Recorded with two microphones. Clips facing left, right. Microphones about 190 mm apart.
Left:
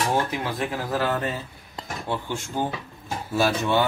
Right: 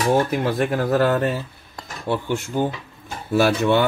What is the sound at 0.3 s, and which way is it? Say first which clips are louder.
Speech: right 7 dB; 55° right (ahead or behind).